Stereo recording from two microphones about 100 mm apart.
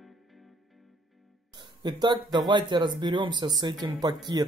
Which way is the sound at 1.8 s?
50° right (ahead or behind).